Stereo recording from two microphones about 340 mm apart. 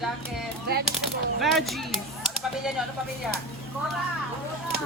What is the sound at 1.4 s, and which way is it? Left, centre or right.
Speech, centre.